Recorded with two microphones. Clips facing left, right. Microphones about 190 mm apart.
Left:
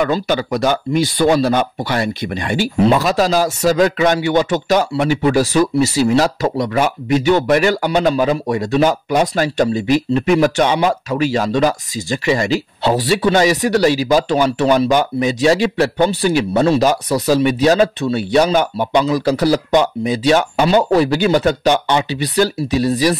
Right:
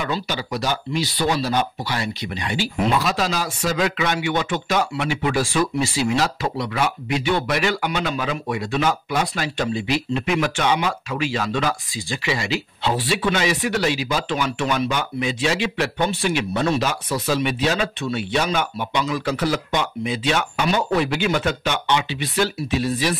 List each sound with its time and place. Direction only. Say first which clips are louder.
0.0 s speech: left 9 dB; 50° left (ahead or behind)